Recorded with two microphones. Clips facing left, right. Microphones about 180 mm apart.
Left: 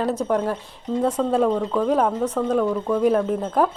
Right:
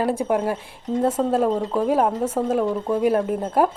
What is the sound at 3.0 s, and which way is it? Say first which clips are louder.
Speech: left 1 dB; 5° right (ahead or behind).